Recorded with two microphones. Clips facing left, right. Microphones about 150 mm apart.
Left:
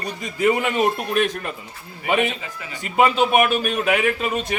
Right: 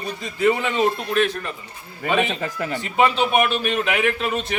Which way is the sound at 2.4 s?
45° right (ahead or behind).